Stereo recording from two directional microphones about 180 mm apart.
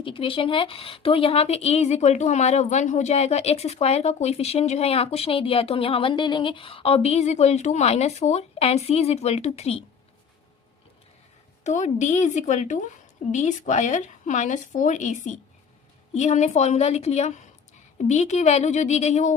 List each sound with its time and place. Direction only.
0.0 s a woman's voice: 30° left (ahead or behind)
11.6 s a woman's voice: 40° left (ahead or behind)